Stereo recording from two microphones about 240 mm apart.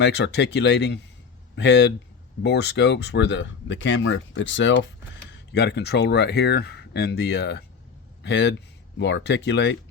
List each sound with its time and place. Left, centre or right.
0.0 s speech: left